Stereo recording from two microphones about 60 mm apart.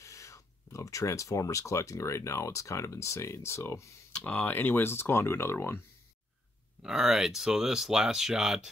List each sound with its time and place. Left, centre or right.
0.0 s speech: left
4.2 s speech: left
6.8 s speech: centre